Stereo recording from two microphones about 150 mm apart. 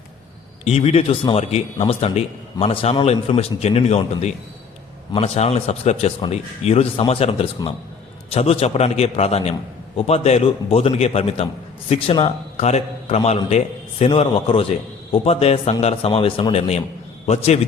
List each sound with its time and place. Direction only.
0.6 s a man's voice: 40° left (ahead or behind)